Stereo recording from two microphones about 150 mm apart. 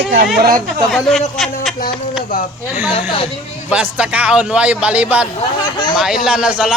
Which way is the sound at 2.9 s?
40° left (ahead or behind).